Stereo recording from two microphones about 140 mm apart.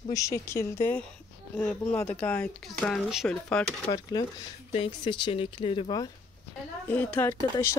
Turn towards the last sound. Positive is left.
turn(degrees=15)  # may be behind; listen again after turning